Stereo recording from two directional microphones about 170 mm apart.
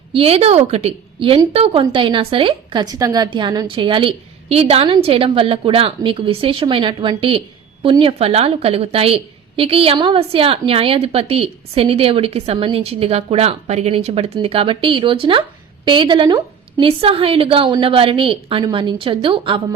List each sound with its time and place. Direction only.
0.1 s a woman's voice: 35° right (ahead or behind)